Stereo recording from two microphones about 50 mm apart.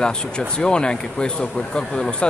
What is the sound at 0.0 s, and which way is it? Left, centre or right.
Speech, centre.